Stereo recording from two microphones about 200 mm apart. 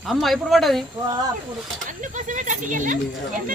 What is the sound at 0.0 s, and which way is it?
Speech, centre (ahead or behind).